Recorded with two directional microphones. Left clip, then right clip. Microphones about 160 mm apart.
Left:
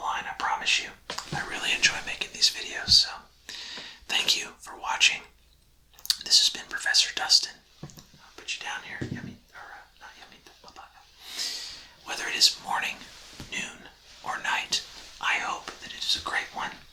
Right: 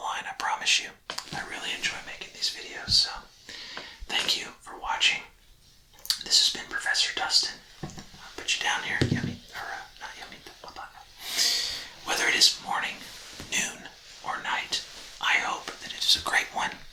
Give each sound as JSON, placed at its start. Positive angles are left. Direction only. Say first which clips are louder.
{"t": 0.0, "sound": "whispering", "louder": "left 1 dB", "side_deg": -15}
{"t": 1.5, "sound": "speech", "louder": "left 8 dB", "side_deg": 5}
{"t": 8.4, "sound": "speech", "louder": "right 7 dB", "side_deg": -5}
{"t": 10.8, "sound": "whispering", "louder": "right 6 dB", "side_deg": -5}
{"t": 12.0, "sound": "a sound", "louder": "right 2 dB", "side_deg": 0}
{"t": 12.6, "sound": "speech", "louder": "left 1 dB", "side_deg": 10}
{"t": 13.5, "sound": "a sound", "louder": "right 5 dB", "side_deg": -20}
{"t": 14.3, "sound": "whispering", "louder": "left 1 dB", "side_deg": 10}
{"t": 15.2, "sound": "whispering", "louder": "right 2 dB", "side_deg": 0}